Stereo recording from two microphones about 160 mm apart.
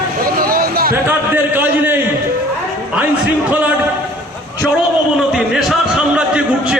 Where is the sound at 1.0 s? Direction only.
15° right (ahead or behind).